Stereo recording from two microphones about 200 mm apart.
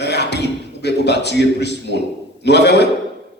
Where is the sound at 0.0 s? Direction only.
60° left (ahead or behind).